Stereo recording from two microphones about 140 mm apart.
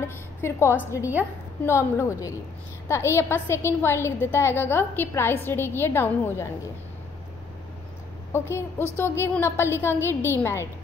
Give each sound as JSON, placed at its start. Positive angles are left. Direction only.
{"t": 0.4, "sound": "a woman's voice", "side_deg": 20}
{"t": 8.3, "sound": "a woman's voice", "side_deg": 15}